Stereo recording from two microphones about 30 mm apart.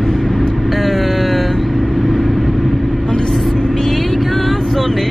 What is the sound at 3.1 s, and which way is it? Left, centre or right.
Vehicle, centre.